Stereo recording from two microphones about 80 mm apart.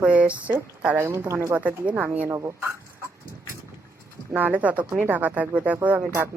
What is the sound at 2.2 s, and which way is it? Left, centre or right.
Speech, right.